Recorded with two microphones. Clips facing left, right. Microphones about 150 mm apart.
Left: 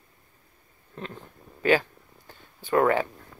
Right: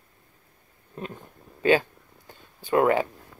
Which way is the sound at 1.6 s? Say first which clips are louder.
Right 2 dB; 20° right (ahead or behind).